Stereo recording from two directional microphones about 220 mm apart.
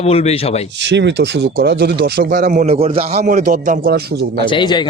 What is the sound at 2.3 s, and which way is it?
A man's voice, 35° right (ahead or behind).